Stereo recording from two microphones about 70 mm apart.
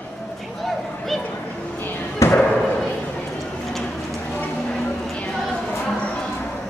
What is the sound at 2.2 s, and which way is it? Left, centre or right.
Slam, left.